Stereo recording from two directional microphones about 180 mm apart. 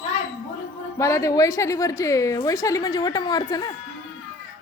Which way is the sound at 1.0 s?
15° left (ahead or behind).